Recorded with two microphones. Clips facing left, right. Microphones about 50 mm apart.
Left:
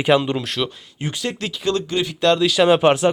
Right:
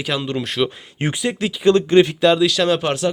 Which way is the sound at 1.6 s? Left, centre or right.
Right.